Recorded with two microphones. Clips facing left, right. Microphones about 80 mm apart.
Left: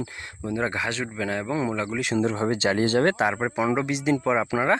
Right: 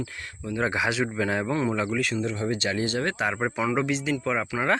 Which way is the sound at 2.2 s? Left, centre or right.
Left.